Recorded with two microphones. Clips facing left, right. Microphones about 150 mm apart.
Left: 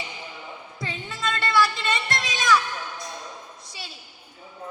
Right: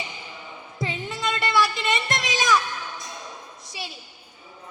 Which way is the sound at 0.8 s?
25° right (ahead or behind).